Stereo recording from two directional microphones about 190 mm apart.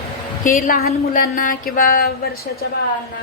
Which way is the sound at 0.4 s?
50° left (ahead or behind).